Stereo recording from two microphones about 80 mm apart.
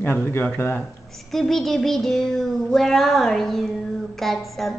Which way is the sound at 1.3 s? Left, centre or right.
Centre.